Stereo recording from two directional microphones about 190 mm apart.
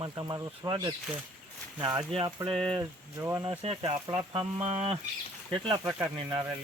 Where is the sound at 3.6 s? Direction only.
30° right (ahead or behind).